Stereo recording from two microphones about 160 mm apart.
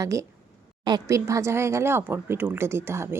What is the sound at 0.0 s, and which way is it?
Speech, 20° right (ahead or behind).